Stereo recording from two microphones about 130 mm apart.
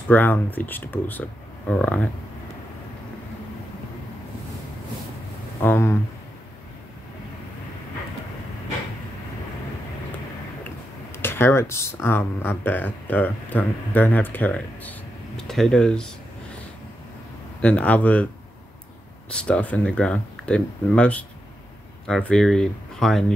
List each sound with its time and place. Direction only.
0.1 s speech: 15° left (ahead or behind)
5.6 s speech: 20° left (ahead or behind)
11.1 s speech: 20° left (ahead or behind)
17.6 s speech: 10° left (ahead or behind)
19.3 s speech: 10° left (ahead or behind)